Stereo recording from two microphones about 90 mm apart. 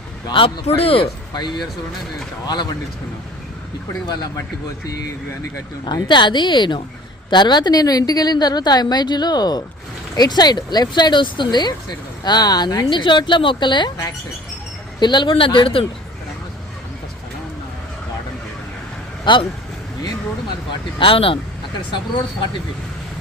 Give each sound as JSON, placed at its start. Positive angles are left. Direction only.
{"t": 0.3, "sound": "a man's voice", "side_deg": 60}
{"t": 1.3, "sound": "a woman's voice", "side_deg": 50}
{"t": 4.1, "sound": "a woman's voice", "side_deg": 45}
{"t": 5.8, "sound": "a woman's voice", "side_deg": 60}
{"t": 14.9, "sound": "speech", "side_deg": 55}
{"t": 19.2, "sound": "speech", "side_deg": 65}
{"t": 21.0, "sound": "speech", "side_deg": 85}